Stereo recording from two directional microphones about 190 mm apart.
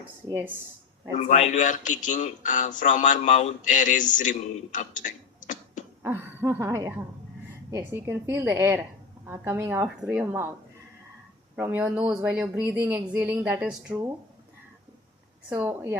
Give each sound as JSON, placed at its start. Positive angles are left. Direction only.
{"t": 0.3, "sound": "speech", "side_deg": -15}
{"t": 1.2, "sound": "speech", "side_deg": 40}
{"t": 6.0, "sound": "speech", "side_deg": -10}
{"t": 11.5, "sound": "speech", "side_deg": -10}
{"t": 15.4, "sound": "speech", "side_deg": -10}